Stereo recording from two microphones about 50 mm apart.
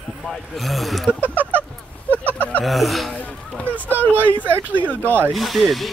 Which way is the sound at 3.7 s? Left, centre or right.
Right.